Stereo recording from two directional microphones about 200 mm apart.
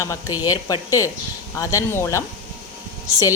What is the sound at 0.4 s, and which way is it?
Speech, 20° left (ahead or behind).